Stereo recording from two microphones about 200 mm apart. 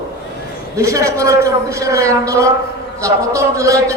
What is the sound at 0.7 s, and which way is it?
A man's voice, 15° right (ahead or behind).